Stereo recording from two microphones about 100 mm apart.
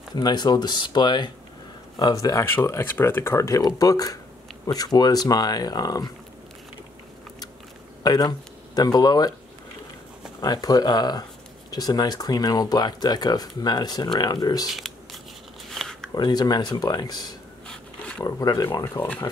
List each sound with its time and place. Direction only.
0.1 s speech: 45° left (ahead or behind)
2.4 s speech: 25° left (ahead or behind); by 6.1 s 40° left (ahead or behind)
8.0 s speech: 40° left (ahead or behind)
10.4 s speech: 40° left (ahead or behind)
15.7 s a sound: 5° left (ahead or behind)
16.2 s speech: 45° left (ahead or behind)
17.6 s wild animals: 10° left (ahead or behind)
18.2 s speech: 45° left (ahead or behind)
19.0 s speech: 25° left (ahead or behind)